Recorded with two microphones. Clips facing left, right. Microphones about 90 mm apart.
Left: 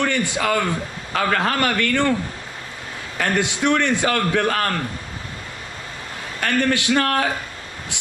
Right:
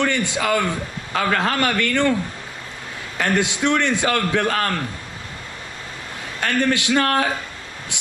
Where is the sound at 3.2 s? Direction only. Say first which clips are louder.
Right 1 dB; 20° right (ahead or behind).